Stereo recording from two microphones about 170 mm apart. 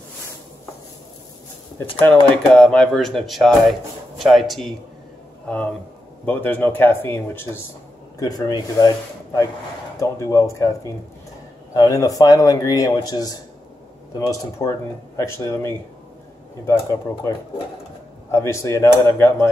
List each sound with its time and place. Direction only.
1.8 s speech: 10° left (ahead or behind)
6.2 s speech: 10° left (ahead or behind)
11.7 s speech: 20° left (ahead or behind)
17.1 s speech: 15° left (ahead or behind)
18.3 s speech: 15° left (ahead or behind)